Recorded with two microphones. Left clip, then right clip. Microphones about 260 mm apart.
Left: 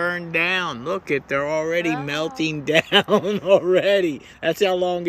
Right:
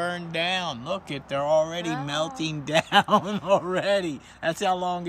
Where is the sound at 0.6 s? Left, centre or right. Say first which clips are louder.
Left 5 dB; right.